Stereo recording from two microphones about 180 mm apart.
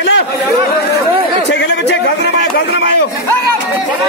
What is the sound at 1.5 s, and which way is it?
A man's voice, 75° left (ahead or behind).